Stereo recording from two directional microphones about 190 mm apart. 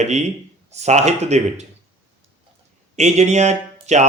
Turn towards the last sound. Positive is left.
turn(degrees=-35)  # may be behind; listen again after turning